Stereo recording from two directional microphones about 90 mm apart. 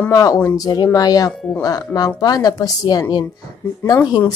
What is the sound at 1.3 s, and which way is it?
Speech, 5° left (ahead or behind).